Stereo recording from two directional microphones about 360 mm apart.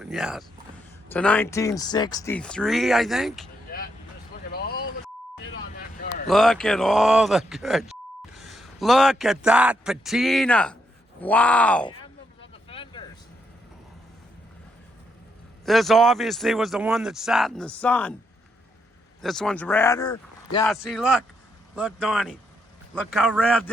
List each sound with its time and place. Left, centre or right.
0.0 s a man's voice: centre
4.5 s vehicle: left
6.0 s a sound: left
6.2 s a man's voice: centre
12.4 s vehicle: centre
15.6 s a man's voice: centre
19.2 s a man's voice: centre
20.7 s a man's voice: centre